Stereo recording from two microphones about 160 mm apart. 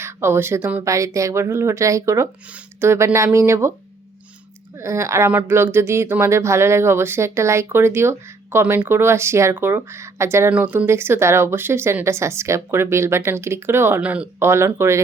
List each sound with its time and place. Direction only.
0.0 s speech: 15° right (ahead or behind)
4.8 s speech: 15° right (ahead or behind)